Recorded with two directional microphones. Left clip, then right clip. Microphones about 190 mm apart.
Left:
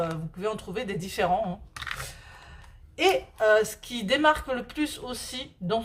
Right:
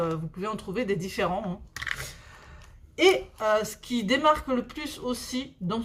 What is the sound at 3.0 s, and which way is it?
Speech, 25° left (ahead or behind).